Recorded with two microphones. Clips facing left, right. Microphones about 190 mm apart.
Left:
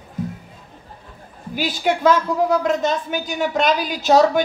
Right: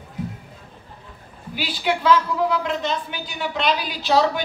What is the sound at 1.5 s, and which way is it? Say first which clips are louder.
Speech: left 3 dB; 45° left (ahead or behind).